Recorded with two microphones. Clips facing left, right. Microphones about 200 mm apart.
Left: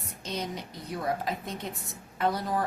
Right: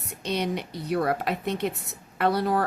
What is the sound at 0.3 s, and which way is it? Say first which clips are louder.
A woman's voice: right 7 dB; 70° right (ahead or behind).